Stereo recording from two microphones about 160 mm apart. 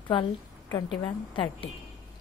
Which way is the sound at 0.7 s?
30° left (ahead or behind).